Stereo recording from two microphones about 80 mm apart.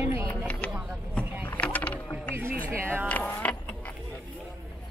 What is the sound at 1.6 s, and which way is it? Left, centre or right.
Boat, centre.